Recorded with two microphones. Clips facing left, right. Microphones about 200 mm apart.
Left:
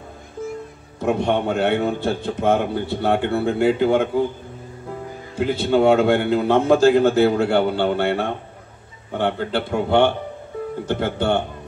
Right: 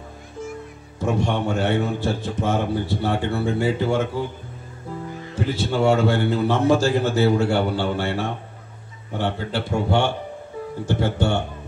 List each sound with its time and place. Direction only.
1.0 s a man's voice: 55° left (ahead or behind)
5.3 s a man's voice: 55° left (ahead or behind)